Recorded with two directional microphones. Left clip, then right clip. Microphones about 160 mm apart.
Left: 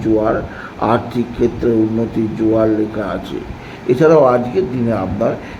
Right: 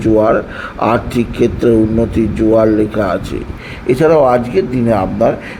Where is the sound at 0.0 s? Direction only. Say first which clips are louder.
Right 4 dB; 15° right (ahead or behind).